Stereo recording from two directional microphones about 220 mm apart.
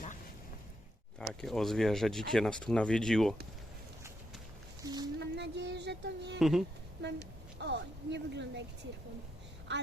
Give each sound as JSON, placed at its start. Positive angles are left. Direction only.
{"t": 1.3, "sound": "speech", "side_deg": 0}
{"t": 4.8, "sound": "speech", "side_deg": -20}
{"t": 5.2, "sound": "speech", "side_deg": -50}
{"t": 6.4, "sound": "speech", "side_deg": 0}
{"t": 7.0, "sound": "speech", "side_deg": -50}